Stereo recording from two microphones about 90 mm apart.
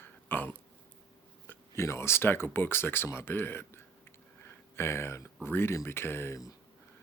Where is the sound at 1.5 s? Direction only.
30° left (ahead or behind).